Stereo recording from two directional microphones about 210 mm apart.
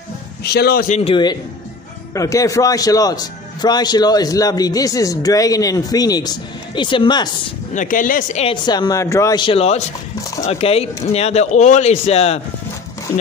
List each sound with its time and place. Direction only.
0.4 s a man's voice: 50° left (ahead or behind); by 7.2 s 20° left (ahead or behind)
7.7 s a man's voice: 40° left (ahead or behind)
8.6 s a man's voice: 20° left (ahead or behind)